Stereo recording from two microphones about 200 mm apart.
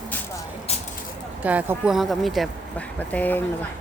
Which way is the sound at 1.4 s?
10° right (ahead or behind).